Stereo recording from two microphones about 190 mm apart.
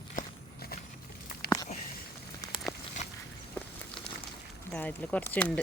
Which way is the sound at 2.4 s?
20° left (ahead or behind).